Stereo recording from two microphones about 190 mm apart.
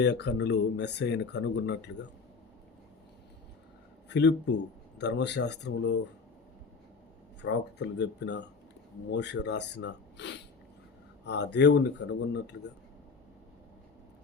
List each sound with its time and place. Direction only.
0.0 s speech: 65° left (ahead or behind)
4.1 s speech: 65° left (ahead or behind)
7.4 s speech: 65° left (ahead or behind)